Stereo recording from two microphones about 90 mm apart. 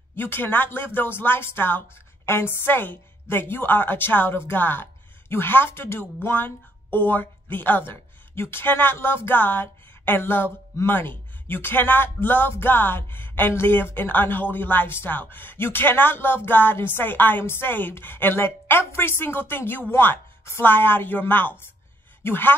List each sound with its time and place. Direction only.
0.1 s speech: 25° left (ahead or behind)